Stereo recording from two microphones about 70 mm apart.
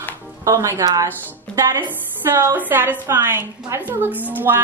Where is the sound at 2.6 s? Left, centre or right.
Right.